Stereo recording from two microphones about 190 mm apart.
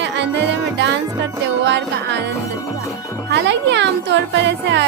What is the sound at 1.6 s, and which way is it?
Speech, 65° right (ahead or behind).